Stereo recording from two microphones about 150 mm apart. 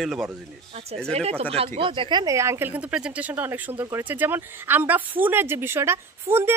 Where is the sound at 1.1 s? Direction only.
45° right (ahead or behind).